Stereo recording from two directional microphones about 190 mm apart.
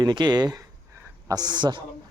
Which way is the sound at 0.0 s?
20° right (ahead or behind).